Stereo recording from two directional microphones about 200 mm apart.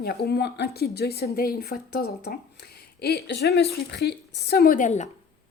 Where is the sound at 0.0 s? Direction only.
50° left (ahead or behind).